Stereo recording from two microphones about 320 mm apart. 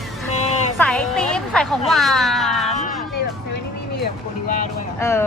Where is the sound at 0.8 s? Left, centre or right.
Centre.